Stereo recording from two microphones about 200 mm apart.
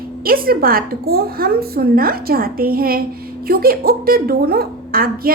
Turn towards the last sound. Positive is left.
turn(degrees=-45)  # may be behind; listen again after turning